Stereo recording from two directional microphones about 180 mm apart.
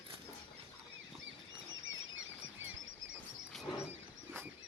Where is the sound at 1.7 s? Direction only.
90° right.